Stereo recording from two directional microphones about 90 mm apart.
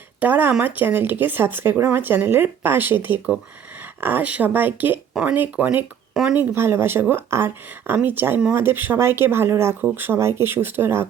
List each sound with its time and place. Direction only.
0.2 s speech: 20° right (ahead or behind)